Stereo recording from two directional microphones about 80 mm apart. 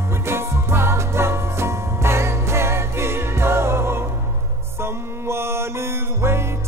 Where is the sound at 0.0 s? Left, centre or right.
Right.